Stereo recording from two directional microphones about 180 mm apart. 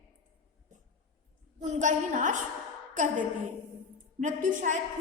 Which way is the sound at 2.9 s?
45° right (ahead or behind).